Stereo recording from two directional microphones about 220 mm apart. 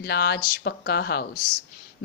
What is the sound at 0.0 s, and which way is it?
Speech, 45° left (ahead or behind).